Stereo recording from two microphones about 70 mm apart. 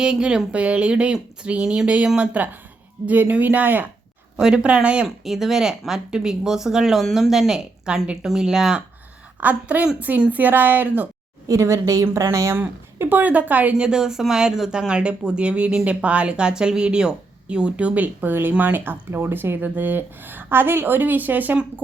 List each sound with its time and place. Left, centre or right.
0.0 s speech: centre
4.4 s speech: centre
5.0 s speech: centre
9.4 s speech: right
11.4 s a woman's voice: right
12.5 s speech: right